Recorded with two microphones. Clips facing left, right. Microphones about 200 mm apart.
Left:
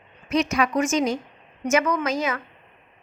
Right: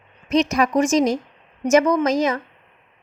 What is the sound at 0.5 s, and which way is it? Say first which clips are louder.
A woman's voice: right 4 dB; 40° right (ahead or behind).